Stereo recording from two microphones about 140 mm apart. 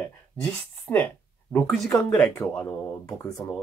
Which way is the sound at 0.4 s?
10° left (ahead or behind).